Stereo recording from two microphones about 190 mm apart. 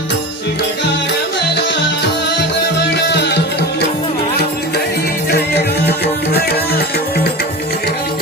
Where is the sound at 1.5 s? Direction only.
65° left (ahead or behind).